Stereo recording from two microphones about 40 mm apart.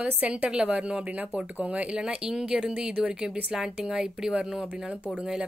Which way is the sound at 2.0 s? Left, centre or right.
Centre.